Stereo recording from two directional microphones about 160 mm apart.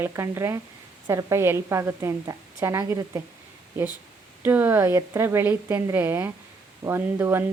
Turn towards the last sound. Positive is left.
turn(degrees=-15)  # may be behind; listen again after turning